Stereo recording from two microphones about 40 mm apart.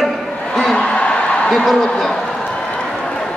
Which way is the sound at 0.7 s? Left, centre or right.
Left.